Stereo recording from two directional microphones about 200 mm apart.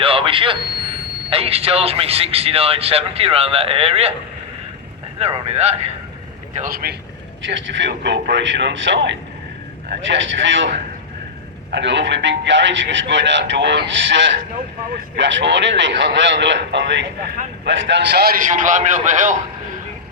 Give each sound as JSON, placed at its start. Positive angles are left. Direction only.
{"t": 0.0, "sound": "a sound", "side_deg": -25}
{"t": 1.3, "sound": "speech", "side_deg": -30}
{"t": 5.2, "sound": "a man's voice", "side_deg": -30}
{"t": 6.5, "sound": "speech", "side_deg": -40}
{"t": 7.4, "sound": "a man's voice", "side_deg": -65}